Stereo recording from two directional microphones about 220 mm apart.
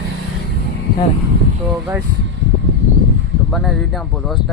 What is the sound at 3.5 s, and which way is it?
Speech, centre (ahead or behind).